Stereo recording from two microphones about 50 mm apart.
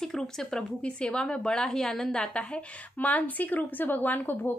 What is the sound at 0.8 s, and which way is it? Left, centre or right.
Speech, left.